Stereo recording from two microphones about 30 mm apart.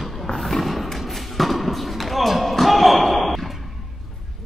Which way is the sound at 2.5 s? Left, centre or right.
Centre.